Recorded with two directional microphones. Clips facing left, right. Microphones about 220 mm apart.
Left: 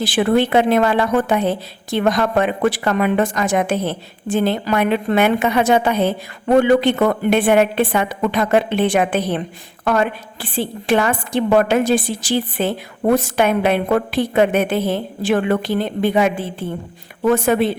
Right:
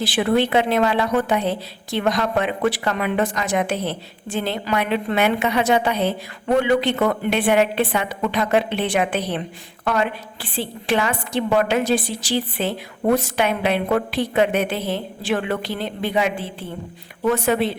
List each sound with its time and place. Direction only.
0.0 s a woman's voice: 45° left (ahead or behind)